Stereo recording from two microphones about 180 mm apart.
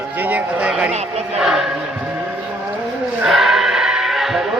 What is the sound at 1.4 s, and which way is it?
Music, 5° right (ahead or behind).